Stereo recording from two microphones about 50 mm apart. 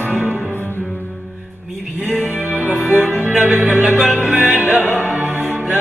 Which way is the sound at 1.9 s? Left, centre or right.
Right.